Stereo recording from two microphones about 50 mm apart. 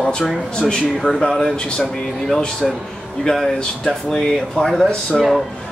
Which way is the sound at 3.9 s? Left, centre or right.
Centre.